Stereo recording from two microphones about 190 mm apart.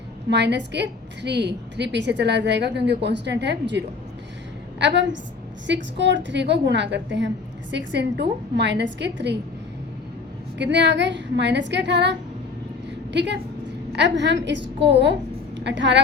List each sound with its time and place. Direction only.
0.3 s a woman's voice: 65° right (ahead or behind)
10.6 s a woman's voice: 65° right (ahead or behind)
13.1 s a woman's voice: 65° right (ahead or behind)